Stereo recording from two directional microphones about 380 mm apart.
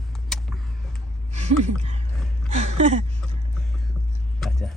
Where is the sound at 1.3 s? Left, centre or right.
Centre.